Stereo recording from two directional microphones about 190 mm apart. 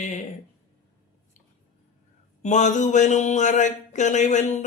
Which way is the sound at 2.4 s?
40° left (ahead or behind).